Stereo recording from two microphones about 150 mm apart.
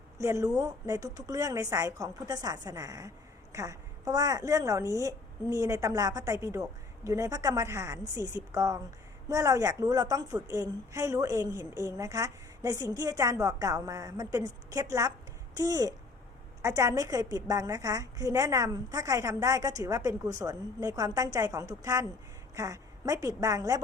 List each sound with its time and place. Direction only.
0.2 s a woman's voice: 20° right (ahead or behind)